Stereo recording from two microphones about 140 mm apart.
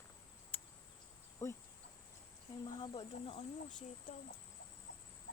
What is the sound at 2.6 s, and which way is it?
Speech, 40° left (ahead or behind).